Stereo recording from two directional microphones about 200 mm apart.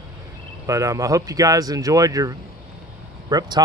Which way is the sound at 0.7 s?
15° right (ahead or behind).